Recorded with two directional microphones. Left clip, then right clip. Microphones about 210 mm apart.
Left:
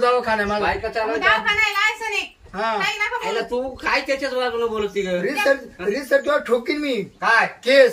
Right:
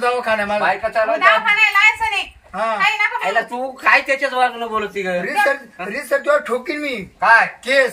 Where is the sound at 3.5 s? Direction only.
5° left (ahead or behind).